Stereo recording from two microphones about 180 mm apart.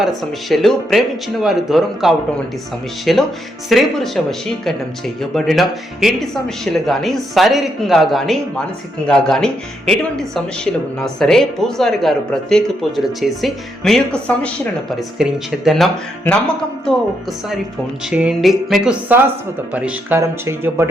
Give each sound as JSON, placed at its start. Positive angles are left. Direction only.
{"t": 0.2, "sound": "speech", "side_deg": 0}
{"t": 18.1, "sound": "music", "side_deg": -5}